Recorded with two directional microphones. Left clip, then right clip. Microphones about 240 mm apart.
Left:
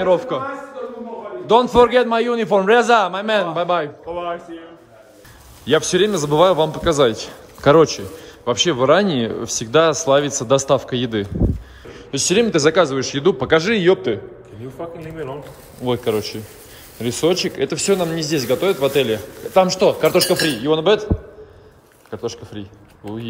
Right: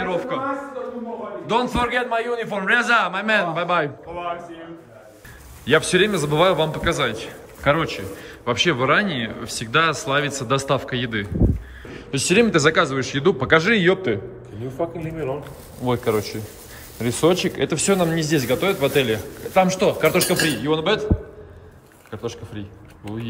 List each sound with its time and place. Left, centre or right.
0.0 s a man's voice: centre
1.5 s a man's voice: centre
5.7 s a man's voice: centre
22.1 s speech: centre